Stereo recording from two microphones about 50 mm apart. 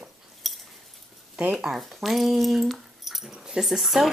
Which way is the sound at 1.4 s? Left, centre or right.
Centre.